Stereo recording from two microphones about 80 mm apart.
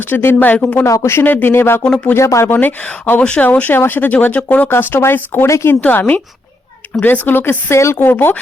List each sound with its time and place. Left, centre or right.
0.1 s speech: left
0.9 s speech: left
1.8 s speech: centre
2.1 s speech: left
2.6 s speech: left
5.5 s speech: left
5.9 s speech: left